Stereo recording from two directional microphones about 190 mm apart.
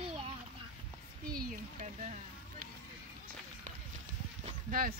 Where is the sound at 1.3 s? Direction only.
50° right (ahead or behind).